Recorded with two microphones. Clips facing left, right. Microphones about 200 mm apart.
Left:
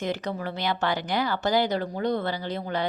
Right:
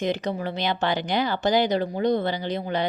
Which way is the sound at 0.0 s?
20° right (ahead or behind).